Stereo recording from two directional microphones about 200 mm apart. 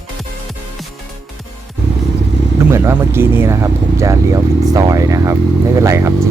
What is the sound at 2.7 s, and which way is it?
Speech, 15° right (ahead or behind).